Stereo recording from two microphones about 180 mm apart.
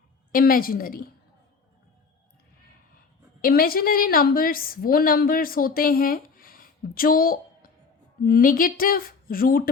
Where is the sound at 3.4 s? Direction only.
55° left (ahead or behind).